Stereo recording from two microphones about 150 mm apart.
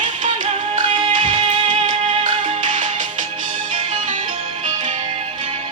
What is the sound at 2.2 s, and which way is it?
Music, 60° right (ahead or behind).